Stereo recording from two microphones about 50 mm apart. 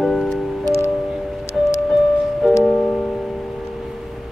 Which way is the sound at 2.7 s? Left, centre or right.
Left.